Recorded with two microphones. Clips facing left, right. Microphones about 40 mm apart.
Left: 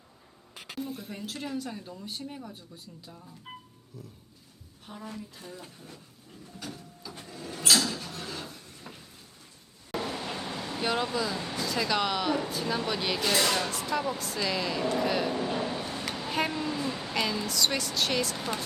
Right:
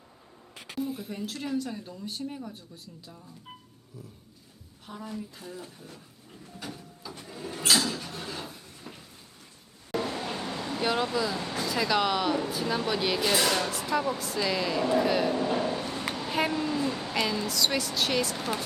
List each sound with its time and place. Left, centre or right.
0.8 s speech: centre
4.9 s a woman's voice: right
5.4 s speech: centre
6.7 s printer: centre
7.3 s drawer open or close: centre
9.9 s vehicle: centre
11.6 s speech: centre
16.1 s a sound: centre